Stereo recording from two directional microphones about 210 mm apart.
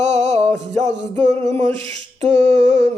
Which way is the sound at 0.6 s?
30° right (ahead or behind).